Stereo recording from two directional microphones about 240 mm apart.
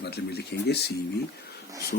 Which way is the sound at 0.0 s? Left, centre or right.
Left.